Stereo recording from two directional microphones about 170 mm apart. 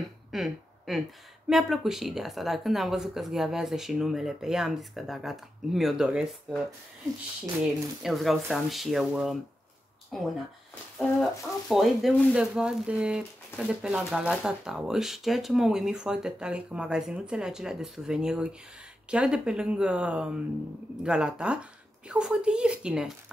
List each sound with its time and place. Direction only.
0.3 s a sound: centre (ahead or behind)
1.5 s speech: centre (ahead or behind)
8.0 s speech: centre (ahead or behind)
11.7 s speech: centre (ahead or behind)